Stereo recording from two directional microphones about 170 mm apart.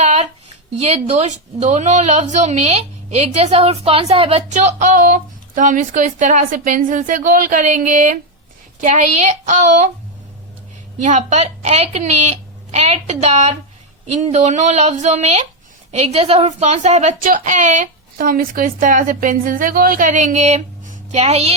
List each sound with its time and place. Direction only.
0.0 s a sound: 40° right (ahead or behind)
0.8 s a woman's voice: 35° right (ahead or behind)
11.0 s a woman's voice: 45° right (ahead or behind)